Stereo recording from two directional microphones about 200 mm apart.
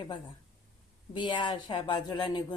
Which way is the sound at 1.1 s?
25° left (ahead or behind).